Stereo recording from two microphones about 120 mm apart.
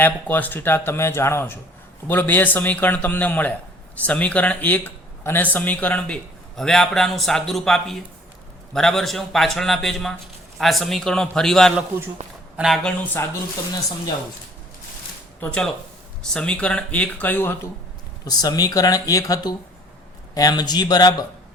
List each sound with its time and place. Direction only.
0.0 s a man's voice: 15° left (ahead or behind); by 12.9 s centre (ahead or behind)
15.4 s speech: 5° left (ahead or behind)
18.3 s speech: 35° left (ahead or behind)